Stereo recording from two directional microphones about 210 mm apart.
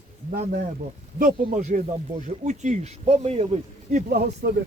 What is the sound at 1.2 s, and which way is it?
Speech, 35° right (ahead or behind).